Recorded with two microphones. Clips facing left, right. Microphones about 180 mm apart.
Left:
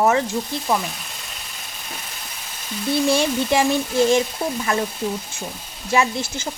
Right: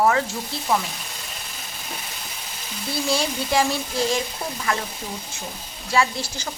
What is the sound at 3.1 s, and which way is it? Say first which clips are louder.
A child's voice: left 4 dB; 25° left (ahead or behind).